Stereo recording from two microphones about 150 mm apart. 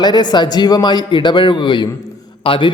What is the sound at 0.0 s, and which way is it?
A man's voice, 30° left (ahead or behind).